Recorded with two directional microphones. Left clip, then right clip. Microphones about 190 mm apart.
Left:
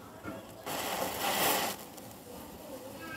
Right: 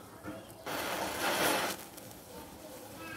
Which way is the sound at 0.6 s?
15° right (ahead or behind).